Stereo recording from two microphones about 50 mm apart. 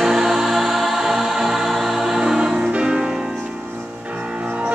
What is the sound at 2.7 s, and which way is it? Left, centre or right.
Music, centre.